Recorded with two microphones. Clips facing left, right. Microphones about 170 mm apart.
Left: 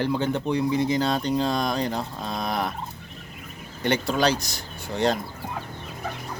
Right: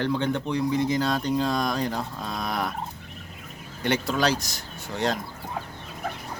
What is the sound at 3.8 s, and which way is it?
Speech, centre (ahead or behind).